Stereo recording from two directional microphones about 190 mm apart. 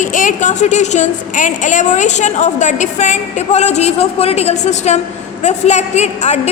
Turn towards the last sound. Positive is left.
turn(degrees=35)  # may be behind; listen again after turning